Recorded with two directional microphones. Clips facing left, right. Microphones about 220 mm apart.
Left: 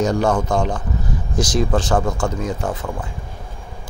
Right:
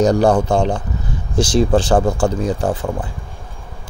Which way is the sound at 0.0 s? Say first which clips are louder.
Right 5 dB; 35° right (ahead or behind).